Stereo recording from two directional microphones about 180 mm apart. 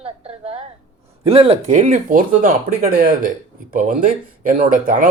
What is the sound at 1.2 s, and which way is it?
Speech, 35° right (ahead or behind).